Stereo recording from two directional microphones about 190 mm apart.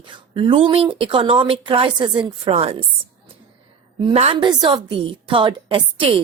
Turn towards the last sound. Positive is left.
turn(degrees=-30)  # may be behind; listen again after turning